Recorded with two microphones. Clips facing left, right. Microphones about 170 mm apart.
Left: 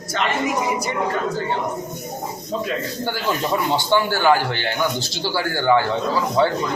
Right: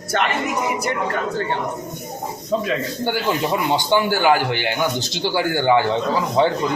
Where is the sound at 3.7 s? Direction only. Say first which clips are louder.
Right 2 dB; 15° right (ahead or behind).